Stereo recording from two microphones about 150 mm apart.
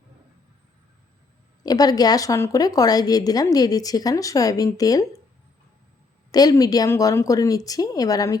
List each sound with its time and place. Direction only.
1.6 s a woman's voice: 25° left (ahead or behind)
6.3 s a woman's voice: 25° left (ahead or behind)